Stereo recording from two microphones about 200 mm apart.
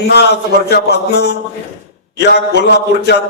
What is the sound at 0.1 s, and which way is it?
A man's voice, 55° left (ahead or behind).